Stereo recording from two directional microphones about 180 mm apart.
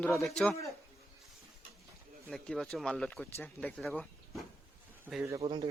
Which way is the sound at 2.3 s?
5° left (ahead or behind).